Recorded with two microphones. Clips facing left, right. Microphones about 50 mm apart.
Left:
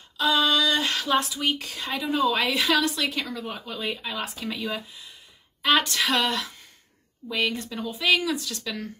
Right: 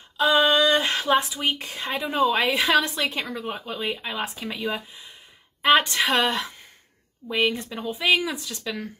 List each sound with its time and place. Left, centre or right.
0.2 s a sound: right
2.0 s speech: right
3.5 s speech: centre
5.6 s speech: right